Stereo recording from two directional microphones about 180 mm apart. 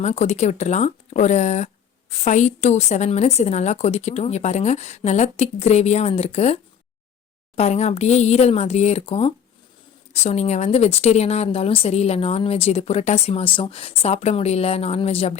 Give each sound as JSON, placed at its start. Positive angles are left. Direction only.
{"t": 0.0, "sound": "speech", "side_deg": 40}